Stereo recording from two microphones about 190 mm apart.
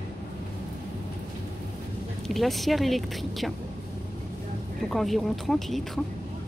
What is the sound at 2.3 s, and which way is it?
Speech, centre (ahead or behind).